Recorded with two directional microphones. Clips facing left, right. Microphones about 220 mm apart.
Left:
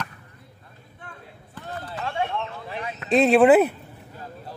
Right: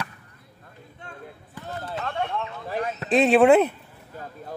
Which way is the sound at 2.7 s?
45° right (ahead or behind).